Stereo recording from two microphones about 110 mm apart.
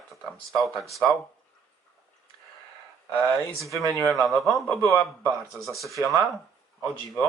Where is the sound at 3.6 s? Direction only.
30° right (ahead or behind).